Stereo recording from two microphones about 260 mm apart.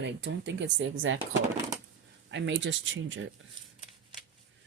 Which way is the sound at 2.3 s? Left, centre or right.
Right.